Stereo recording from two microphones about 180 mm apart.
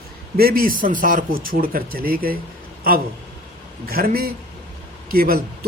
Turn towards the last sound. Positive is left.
turn(degrees=-55)  # may be behind; listen again after turning